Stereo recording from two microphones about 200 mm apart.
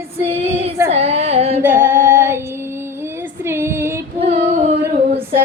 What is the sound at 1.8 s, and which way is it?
Female singing, 10° right (ahead or behind).